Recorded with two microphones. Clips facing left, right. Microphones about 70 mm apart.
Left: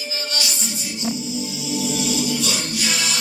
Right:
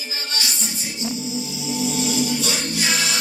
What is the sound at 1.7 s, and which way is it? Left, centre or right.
Music, right.